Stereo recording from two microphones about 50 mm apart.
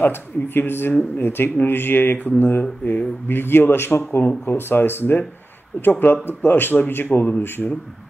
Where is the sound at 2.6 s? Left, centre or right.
Left.